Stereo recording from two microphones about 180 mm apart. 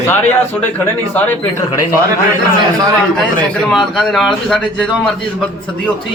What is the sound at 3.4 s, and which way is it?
A man's voice, centre (ahead or behind).